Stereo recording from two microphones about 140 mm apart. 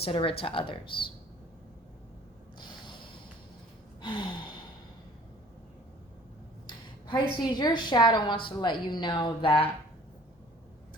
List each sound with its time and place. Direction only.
0.0 s a woman's voice: 40° left (ahead or behind)
2.6 s a sound: 35° left (ahead or behind)
4.0 s gasp: 35° left (ahead or behind)
6.7 s a woman's voice: 30° left (ahead or behind)